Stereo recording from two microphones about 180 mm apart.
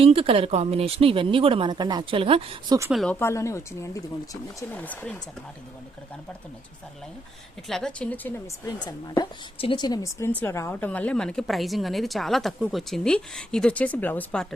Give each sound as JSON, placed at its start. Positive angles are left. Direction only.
{"t": 0.0, "sound": "speech", "side_deg": -30}
{"t": 2.9, "sound": "a woman's voice", "side_deg": 0}
{"t": 3.2, "sound": "speech", "side_deg": 15}
{"t": 7.7, "sound": "a woman's voice", "side_deg": 5}
{"t": 8.6, "sound": "a woman's voice", "side_deg": 20}